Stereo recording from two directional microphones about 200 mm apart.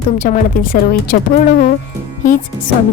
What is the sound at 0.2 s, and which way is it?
A woman's voice, 40° left (ahead or behind).